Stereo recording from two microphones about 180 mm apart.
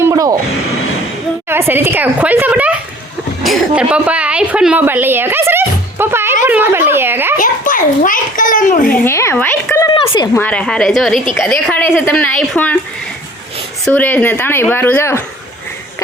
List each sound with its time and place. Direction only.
0.0 s a sound: 20° right (ahead or behind)
1.5 s a woman's voice: 10° right (ahead or behind)
7.3 s a child's voice: 50° left (ahead or behind)
9.0 s a woman's voice: 15° left (ahead or behind)
9.9 s speech: 30° left (ahead or behind)
10.3 s a woman's voice: 5° left (ahead or behind)
13.8 s a woman's voice: 10° left (ahead or behind)